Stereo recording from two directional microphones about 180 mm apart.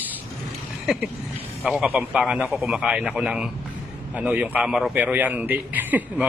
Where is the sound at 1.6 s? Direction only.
5° right (ahead or behind).